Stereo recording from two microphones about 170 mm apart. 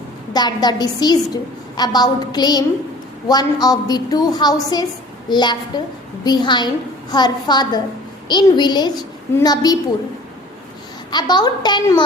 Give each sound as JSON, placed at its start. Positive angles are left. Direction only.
{"t": 0.3, "sound": "a woman's voice", "side_deg": 25}
{"t": 11.1, "sound": "a woman's voice", "side_deg": 25}